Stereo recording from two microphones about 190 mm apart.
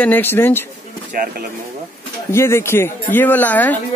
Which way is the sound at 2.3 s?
15° left (ahead or behind).